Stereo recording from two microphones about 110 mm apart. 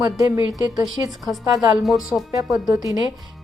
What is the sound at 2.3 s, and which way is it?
Speech, 30° right (ahead or behind).